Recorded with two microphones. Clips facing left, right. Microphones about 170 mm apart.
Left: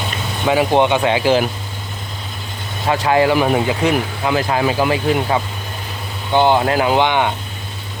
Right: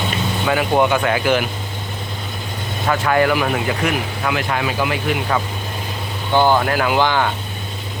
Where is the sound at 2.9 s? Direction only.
25° left (ahead or behind).